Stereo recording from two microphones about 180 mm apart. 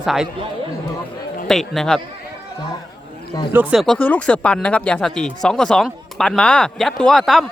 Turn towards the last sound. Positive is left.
turn(degrees=0)  # may be behind; listen again after turning